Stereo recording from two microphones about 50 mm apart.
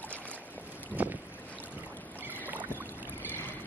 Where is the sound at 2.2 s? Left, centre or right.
Right.